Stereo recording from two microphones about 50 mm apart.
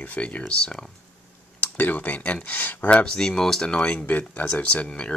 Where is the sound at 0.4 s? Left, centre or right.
Centre.